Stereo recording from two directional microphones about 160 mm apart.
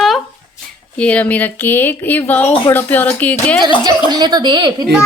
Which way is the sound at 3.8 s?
25° right (ahead or behind).